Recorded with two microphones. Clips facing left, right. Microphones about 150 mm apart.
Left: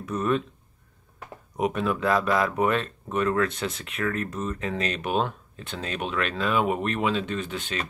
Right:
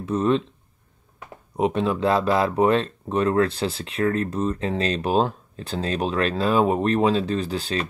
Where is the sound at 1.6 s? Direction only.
30° right (ahead or behind).